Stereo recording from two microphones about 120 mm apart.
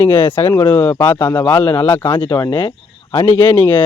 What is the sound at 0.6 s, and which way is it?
Speech, 35° left (ahead or behind).